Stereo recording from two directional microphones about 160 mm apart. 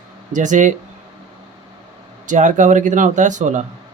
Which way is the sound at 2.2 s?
50° right (ahead or behind).